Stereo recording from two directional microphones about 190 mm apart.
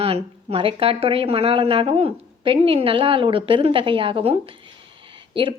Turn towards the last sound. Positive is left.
turn(degrees=-25)  # may be behind; listen again after turning